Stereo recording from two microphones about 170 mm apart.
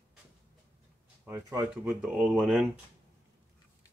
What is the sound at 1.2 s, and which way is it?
Speech, 15° right (ahead or behind).